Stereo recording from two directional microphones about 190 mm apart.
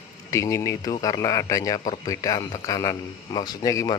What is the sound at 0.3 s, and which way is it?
A man's voice, 15° left (ahead or behind).